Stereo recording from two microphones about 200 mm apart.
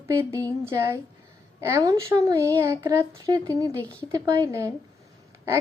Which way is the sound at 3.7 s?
5° left (ahead or behind).